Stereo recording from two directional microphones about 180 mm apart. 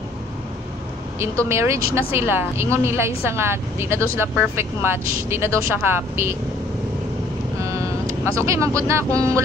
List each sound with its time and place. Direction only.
1.2 s speech: 15° right (ahead or behind)
7.6 s vehicle: 15° right (ahead or behind)